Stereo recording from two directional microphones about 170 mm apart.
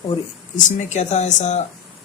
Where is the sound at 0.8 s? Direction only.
45° left (ahead or behind).